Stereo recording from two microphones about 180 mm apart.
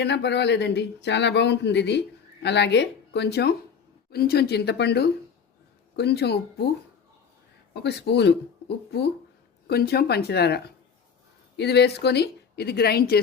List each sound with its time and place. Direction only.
0.0 s speech: 70° left (ahead or behind)
7.7 s speech: 65° left (ahead or behind)